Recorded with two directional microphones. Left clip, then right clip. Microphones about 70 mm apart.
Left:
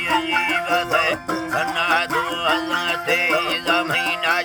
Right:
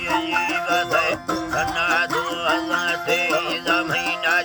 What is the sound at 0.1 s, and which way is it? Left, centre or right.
Music, left.